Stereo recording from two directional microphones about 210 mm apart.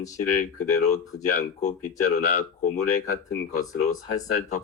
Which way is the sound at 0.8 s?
35° left (ahead or behind).